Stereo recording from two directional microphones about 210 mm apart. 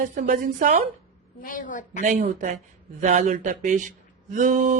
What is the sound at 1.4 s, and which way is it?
Child singing, 40° left (ahead or behind).